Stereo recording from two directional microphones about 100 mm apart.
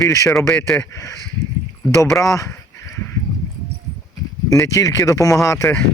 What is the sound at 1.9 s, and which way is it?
Speech, 30° left (ahead or behind).